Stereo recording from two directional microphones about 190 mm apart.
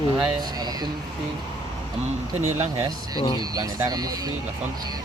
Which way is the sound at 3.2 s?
25° left (ahead or behind).